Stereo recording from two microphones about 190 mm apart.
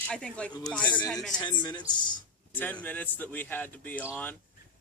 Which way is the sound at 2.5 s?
10° left (ahead or behind).